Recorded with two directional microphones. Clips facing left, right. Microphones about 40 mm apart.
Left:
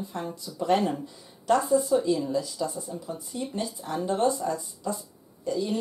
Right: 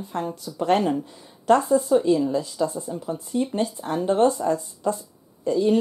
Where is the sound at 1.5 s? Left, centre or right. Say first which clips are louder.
Right 4 dB; right.